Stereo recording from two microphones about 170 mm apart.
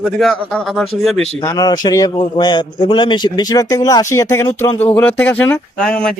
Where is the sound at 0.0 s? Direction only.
5° left (ahead or behind).